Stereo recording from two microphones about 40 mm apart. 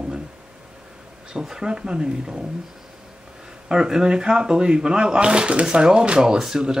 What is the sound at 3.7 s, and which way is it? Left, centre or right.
Speech, centre.